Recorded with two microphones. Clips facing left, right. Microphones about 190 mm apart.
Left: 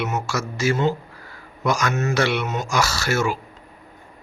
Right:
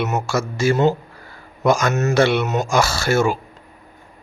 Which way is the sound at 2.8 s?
25° right (ahead or behind).